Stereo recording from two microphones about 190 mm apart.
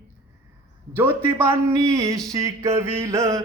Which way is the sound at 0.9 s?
10° right (ahead or behind).